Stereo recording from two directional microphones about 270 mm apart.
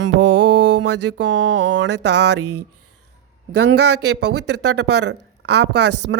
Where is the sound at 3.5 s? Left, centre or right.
Right.